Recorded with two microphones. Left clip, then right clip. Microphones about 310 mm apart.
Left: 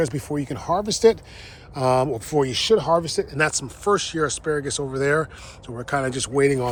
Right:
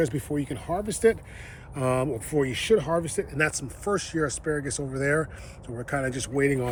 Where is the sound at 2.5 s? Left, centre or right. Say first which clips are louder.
Left 4 dB; left.